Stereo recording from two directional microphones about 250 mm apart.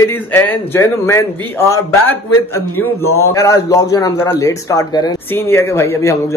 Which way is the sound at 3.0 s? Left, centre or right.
Left.